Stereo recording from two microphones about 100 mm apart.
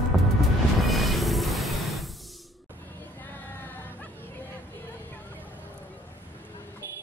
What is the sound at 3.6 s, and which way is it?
Music, 20° left (ahead or behind).